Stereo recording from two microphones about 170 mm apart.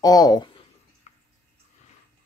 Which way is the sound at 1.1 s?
40° left (ahead or behind).